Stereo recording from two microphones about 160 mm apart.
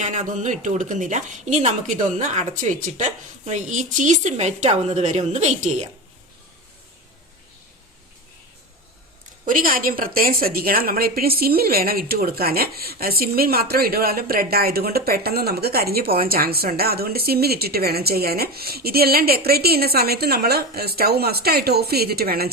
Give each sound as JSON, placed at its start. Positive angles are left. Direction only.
{"t": 0.0, "sound": "a woman's voice", "side_deg": -50}
{"t": 9.5, "sound": "a woman's voice", "side_deg": -60}